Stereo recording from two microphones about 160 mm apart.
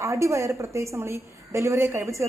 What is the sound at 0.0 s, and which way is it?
A woman's voice, 20° right (ahead or behind).